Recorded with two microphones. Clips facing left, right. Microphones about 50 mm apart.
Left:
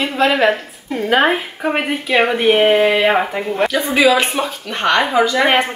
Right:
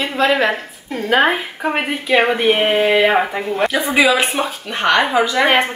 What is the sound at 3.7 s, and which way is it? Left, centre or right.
Speech, centre.